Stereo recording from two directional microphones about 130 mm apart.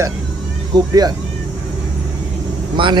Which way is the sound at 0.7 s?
30° right (ahead or behind).